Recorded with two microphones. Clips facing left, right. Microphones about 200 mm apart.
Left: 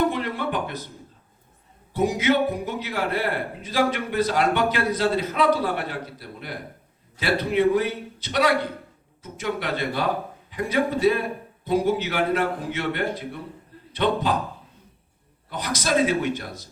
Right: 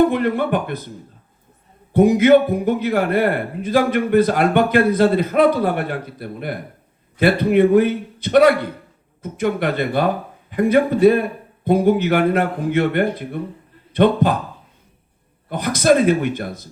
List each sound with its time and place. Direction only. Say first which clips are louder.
0.1 s speech: right 8 dB; 55° right (ahead or behind)
1.9 s a man's voice: right 10 dB; 55° right (ahead or behind)
15.4 s speech: right 11 dB; 55° right (ahead or behind)